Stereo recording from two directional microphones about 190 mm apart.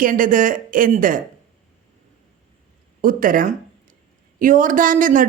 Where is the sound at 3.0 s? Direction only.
45° right (ahead or behind).